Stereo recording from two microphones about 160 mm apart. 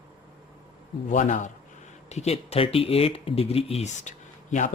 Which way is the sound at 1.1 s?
50° left (ahead or behind).